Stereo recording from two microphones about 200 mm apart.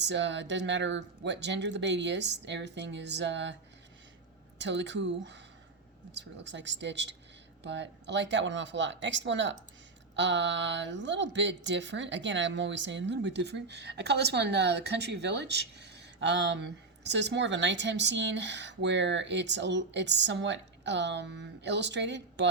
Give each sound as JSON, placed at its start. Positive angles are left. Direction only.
{"t": 0.0, "sound": "speech", "side_deg": -65}
{"t": 4.6, "sound": "speech", "side_deg": -60}